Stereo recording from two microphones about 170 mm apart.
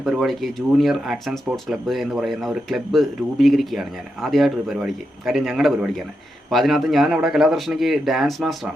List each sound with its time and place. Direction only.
0.0 s speech: centre (ahead or behind)